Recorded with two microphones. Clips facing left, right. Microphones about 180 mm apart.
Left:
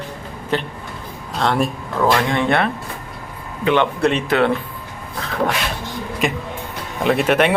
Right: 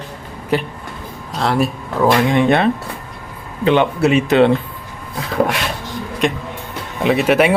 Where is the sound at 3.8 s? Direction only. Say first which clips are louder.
Right 3 dB; 5° right (ahead or behind).